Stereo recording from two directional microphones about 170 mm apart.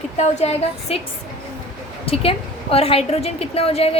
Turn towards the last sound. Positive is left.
turn(degrees=35)  # may be behind; listen again after turning